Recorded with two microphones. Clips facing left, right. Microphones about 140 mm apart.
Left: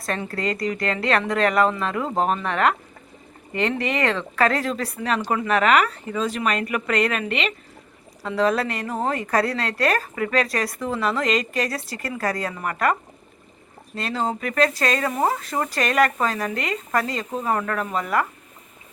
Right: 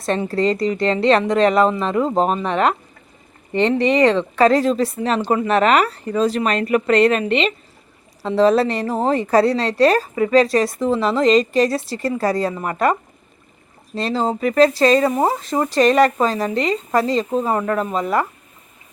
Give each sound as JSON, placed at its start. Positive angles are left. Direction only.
{"t": 0.0, "sound": "a woman's voice", "side_deg": -25}